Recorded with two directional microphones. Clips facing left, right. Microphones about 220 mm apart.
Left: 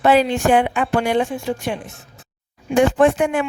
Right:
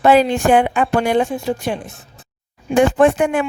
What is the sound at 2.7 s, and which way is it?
Speech, 50° right (ahead or behind).